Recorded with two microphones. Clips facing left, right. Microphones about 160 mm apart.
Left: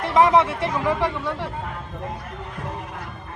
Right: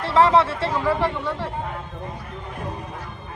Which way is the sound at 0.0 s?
15° left (ahead or behind).